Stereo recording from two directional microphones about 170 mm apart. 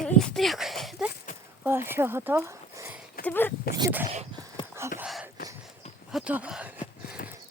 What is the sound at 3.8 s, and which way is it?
Speech, 15° right (ahead or behind).